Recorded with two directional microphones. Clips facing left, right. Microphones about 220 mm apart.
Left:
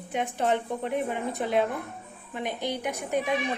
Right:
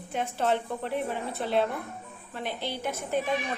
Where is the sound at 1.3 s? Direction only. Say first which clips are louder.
Left 1 dB; 15° left (ahead or behind).